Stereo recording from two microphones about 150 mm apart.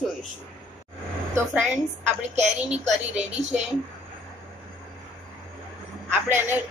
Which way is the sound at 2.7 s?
50° right (ahead or behind).